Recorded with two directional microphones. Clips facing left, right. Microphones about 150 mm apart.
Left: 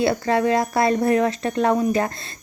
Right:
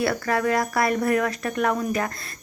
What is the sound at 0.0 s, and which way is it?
Speech, 25° left (ahead or behind).